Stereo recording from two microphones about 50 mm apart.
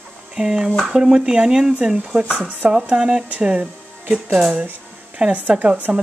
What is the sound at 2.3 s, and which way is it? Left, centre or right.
Speech, right.